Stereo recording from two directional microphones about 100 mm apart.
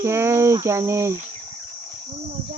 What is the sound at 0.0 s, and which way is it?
Cricket, 25° right (ahead or behind).